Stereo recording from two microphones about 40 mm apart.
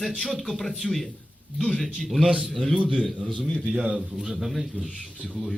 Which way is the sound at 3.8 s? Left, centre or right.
Right.